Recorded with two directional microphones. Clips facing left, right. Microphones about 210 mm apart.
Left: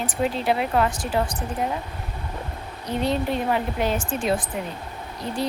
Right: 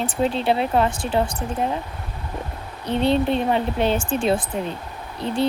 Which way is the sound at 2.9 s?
25° right (ahead or behind).